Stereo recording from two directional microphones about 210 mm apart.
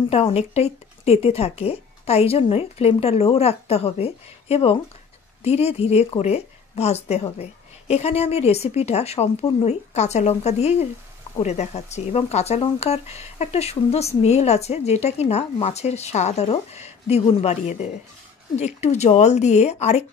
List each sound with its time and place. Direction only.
0.1 s speech: 30° left (ahead or behind)